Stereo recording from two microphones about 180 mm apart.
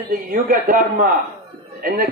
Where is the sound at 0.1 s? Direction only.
55° right (ahead or behind).